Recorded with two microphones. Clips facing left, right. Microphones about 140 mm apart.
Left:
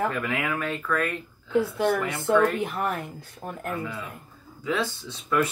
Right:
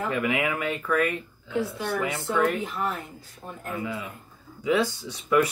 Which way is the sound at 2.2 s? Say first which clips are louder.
Left 5 dB; 65° left (ahead or behind).